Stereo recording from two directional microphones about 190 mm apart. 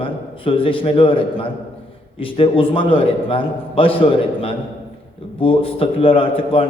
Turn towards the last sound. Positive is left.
turn(degrees=30)  # may be behind; listen again after turning